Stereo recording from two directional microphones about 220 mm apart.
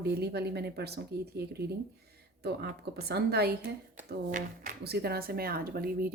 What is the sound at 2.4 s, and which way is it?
A woman's voice, 45° right (ahead or behind).